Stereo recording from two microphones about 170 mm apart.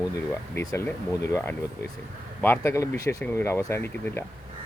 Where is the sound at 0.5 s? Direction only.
20° left (ahead or behind).